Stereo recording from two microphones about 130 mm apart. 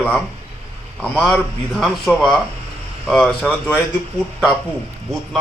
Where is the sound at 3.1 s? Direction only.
5° left (ahead or behind).